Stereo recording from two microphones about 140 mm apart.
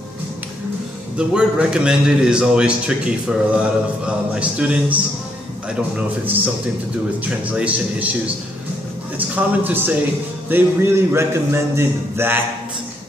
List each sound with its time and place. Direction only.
1.1 s a man's voice: 5° right (ahead or behind)
9.3 s a man's voice: 15° right (ahead or behind)